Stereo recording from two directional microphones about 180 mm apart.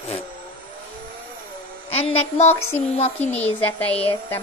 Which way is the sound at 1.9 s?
35° left (ahead or behind).